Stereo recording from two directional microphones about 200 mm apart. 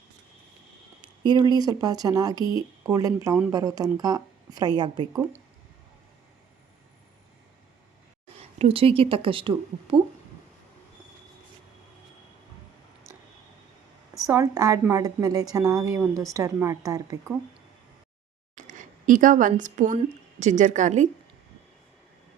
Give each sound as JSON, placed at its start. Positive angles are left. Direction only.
{"t": 1.2, "sound": "a woman's voice", "side_deg": -20}
{"t": 8.4, "sound": "speech", "side_deg": -30}
{"t": 14.3, "sound": "a woman's voice", "side_deg": -15}
{"t": 18.5, "sound": "speech", "side_deg": -40}